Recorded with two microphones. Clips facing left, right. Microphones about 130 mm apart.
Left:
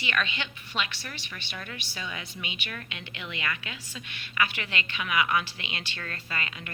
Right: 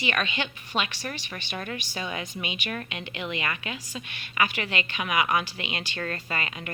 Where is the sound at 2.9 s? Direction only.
55° right (ahead or behind).